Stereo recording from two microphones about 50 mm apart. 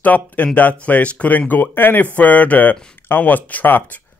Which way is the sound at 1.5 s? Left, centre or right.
Left.